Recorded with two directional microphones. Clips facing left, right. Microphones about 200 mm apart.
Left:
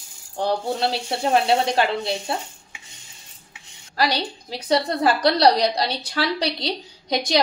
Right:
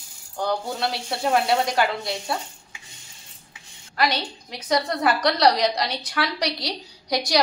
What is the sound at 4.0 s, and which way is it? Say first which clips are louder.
A woman's voice: left 1 dB; 35° left (ahead or behind).